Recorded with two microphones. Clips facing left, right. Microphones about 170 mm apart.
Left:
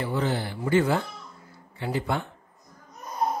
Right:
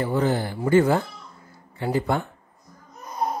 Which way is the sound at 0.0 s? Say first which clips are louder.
Right 4 dB; 45° right (ahead or behind).